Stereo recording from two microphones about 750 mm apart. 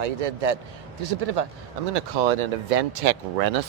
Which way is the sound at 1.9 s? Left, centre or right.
Right.